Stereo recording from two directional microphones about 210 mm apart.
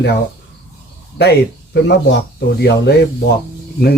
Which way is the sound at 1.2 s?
50° left (ahead or behind).